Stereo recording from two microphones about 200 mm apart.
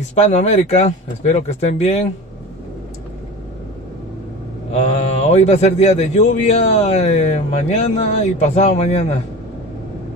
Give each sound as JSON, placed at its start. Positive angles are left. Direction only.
{"t": 0.1, "sound": "a man's voice", "side_deg": 35}
{"t": 4.7, "sound": "a man's voice", "side_deg": 35}